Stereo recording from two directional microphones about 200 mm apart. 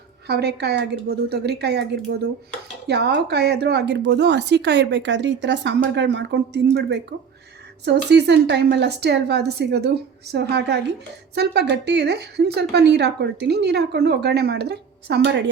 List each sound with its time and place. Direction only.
0.3 s speech: 55° right (ahead or behind)
2.8 s speech: 55° right (ahead or behind)